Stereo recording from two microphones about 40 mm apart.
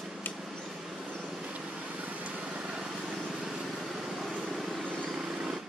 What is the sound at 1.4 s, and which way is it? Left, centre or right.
Vehicle, right.